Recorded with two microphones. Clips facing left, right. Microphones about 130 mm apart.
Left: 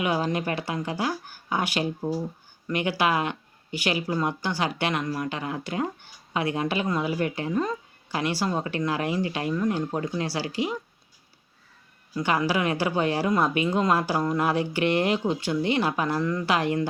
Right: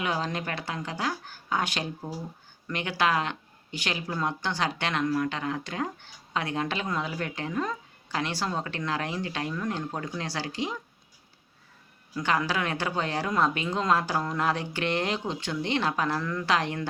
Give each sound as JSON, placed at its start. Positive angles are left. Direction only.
{"t": 0.0, "sound": "speech", "side_deg": 10}
{"t": 12.1, "sound": "speech", "side_deg": 10}